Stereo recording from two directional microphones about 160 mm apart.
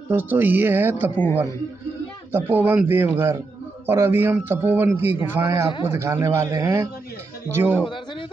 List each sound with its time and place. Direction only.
0.1 s a man's voice: 10° right (ahead or behind)
1.1 s speech: 10° left (ahead or behind)
2.3 s a man's voice: 10° right (ahead or behind)